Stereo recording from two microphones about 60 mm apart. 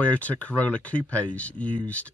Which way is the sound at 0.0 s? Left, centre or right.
Left.